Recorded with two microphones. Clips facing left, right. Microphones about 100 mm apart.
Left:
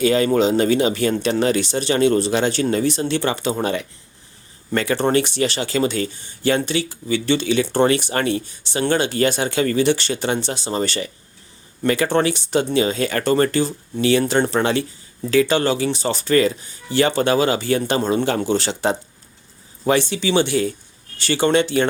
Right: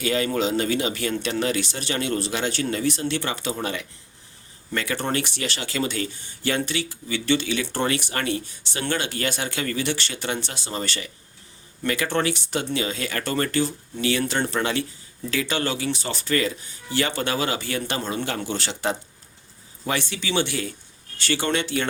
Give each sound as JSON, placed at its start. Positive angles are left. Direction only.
{"t": 0.0, "sound": "speech", "side_deg": 30}
{"t": 20.0, "sound": "speech", "side_deg": 25}